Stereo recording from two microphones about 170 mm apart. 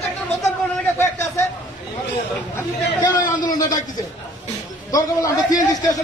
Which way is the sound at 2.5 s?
20° left (ahead or behind).